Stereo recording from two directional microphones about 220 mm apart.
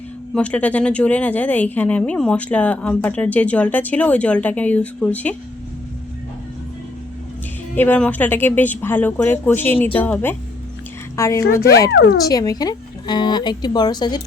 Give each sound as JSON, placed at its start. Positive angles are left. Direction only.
{"t": 0.3, "sound": "speech", "side_deg": 5}
{"t": 7.8, "sound": "speech", "side_deg": 5}
{"t": 11.9, "sound": "speech", "side_deg": 55}
{"t": 12.3, "sound": "speech", "side_deg": 15}